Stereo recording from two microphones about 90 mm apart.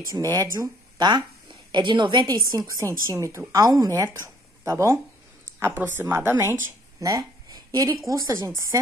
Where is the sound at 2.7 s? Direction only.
35° right (ahead or behind).